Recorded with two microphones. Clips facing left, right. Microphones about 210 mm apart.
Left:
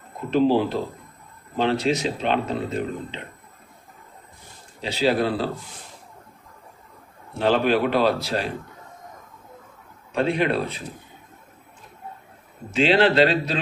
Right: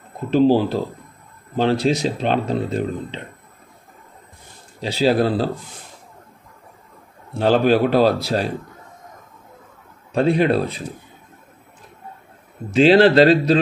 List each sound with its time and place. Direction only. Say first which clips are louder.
0.3 s speech: right 4 dB; 35° right (ahead or behind)
4.8 s speech: right 4 dB; 35° right (ahead or behind)
7.3 s speech: right 4 dB; 40° right (ahead or behind)
10.1 s speech: right 5 dB; 35° right (ahead or behind)
12.7 s speech: right 6 dB; 40° right (ahead or behind)